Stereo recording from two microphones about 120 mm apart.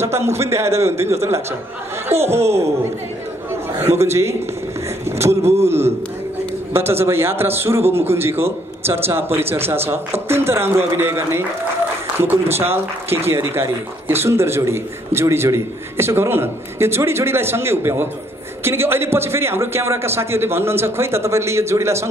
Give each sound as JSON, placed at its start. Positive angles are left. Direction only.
{"t": 0.0, "sound": "speech", "side_deg": -20}
{"t": 4.0, "sound": "speech", "side_deg": -25}
{"t": 5.0, "sound": "a sound", "side_deg": -20}
{"t": 5.7, "sound": "speech", "side_deg": -20}